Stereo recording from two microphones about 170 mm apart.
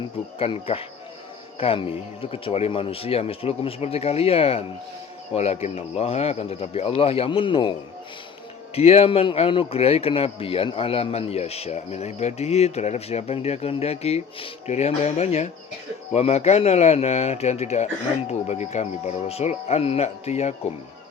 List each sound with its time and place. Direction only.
0.3 s speech: 35° left (ahead or behind)
8.7 s speech: 35° left (ahead or behind)